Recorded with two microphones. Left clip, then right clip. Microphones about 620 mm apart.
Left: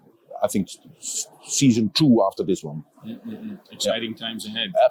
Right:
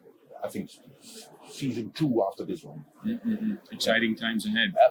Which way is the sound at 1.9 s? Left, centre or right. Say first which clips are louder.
Left 5 dB; left.